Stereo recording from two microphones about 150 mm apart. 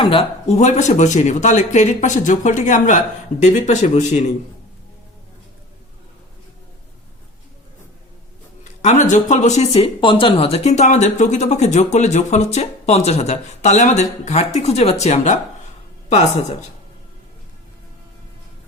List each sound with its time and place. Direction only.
0.0 s speech: 40° left (ahead or behind)
8.8 s speech: 55° left (ahead or behind)
9.8 s speech: 35° left (ahead or behind)